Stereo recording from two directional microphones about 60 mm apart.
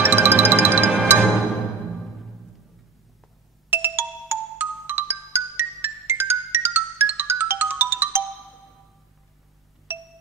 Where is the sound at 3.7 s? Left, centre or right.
Right.